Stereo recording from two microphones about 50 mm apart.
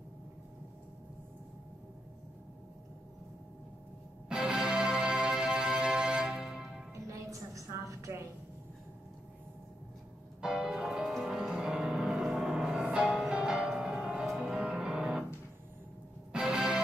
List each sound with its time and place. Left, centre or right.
4.3 s music: centre
6.9 s music: right
10.4 s music: centre
14.2 s music: centre
16.3 s music: centre